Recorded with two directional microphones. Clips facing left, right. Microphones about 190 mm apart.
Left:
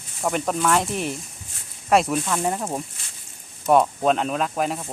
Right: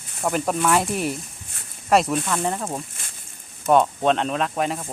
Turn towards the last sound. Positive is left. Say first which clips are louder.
# even
turn(degrees=0)  # may be behind; listen again after turning